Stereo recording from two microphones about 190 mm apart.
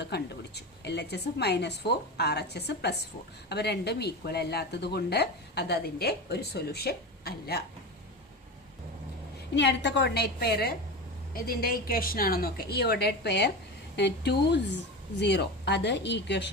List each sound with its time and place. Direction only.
0.0 s speech: 60° left (ahead or behind)
9.6 s a woman's voice: 65° left (ahead or behind)